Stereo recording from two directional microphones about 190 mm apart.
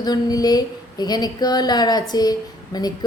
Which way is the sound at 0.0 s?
20° left (ahead or behind).